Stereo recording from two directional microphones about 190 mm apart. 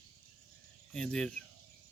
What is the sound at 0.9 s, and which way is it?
Speech, 5° left (ahead or behind).